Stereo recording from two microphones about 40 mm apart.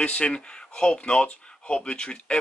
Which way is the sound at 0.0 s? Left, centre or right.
Left.